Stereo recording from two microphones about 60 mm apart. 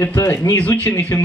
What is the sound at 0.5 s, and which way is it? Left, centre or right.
Speech, left.